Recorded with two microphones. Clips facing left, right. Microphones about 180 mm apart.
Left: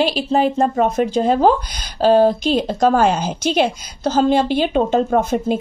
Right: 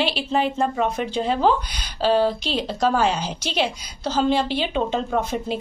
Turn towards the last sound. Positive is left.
turn(degrees=50)  # may be behind; listen again after turning